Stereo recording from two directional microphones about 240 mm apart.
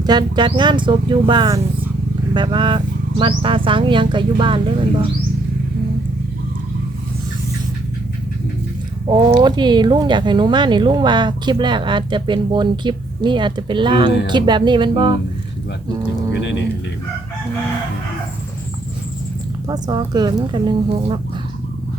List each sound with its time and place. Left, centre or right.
0.0 s speech: centre
9.0 s speech: centre
19.6 s speech: centre